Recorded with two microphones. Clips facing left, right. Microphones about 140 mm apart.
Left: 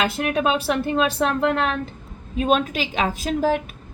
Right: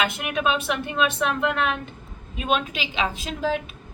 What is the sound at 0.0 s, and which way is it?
Speech, 35° left (ahead or behind).